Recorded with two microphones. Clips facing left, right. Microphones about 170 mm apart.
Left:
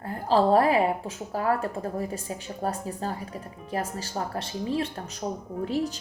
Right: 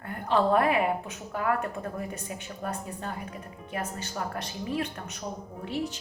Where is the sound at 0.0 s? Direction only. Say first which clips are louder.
Left 3 dB; 30° left (ahead or behind).